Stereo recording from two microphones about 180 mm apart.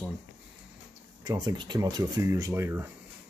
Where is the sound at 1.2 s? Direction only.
20° right (ahead or behind).